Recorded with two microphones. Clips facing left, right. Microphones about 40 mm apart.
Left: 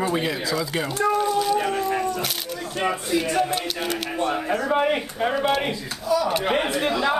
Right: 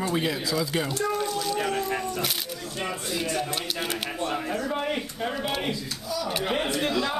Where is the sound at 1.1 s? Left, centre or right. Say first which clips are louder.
Left 7 dB; centre.